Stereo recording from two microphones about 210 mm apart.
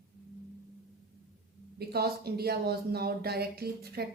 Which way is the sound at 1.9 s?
50° right (ahead or behind).